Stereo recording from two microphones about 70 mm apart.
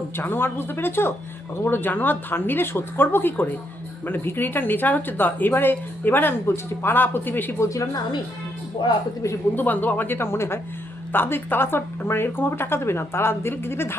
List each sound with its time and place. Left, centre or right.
0.2 s speech: left
7.6 s a woman's voice: left
9.6 s speech: left